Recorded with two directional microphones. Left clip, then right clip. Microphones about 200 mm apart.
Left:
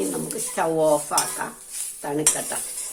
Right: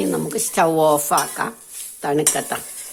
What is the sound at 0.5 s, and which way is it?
Dishes, 55° right (ahead or behind).